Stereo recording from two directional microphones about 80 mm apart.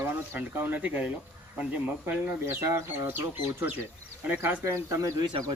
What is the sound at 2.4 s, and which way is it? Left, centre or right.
Speech, right.